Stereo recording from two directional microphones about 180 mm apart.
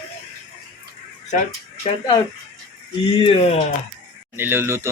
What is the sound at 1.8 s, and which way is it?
Speech, 30° left (ahead or behind).